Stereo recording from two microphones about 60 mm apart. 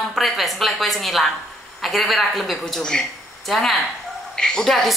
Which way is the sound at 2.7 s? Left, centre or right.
Centre.